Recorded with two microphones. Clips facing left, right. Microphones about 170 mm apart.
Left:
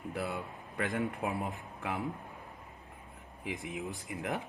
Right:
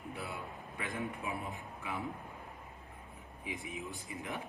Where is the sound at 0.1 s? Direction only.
70° left (ahead or behind).